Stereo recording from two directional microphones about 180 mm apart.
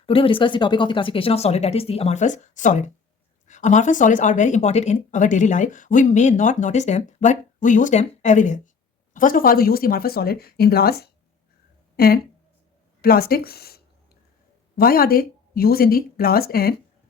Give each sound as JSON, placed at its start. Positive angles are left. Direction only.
{"t": 0.0, "sound": "speech", "side_deg": 30}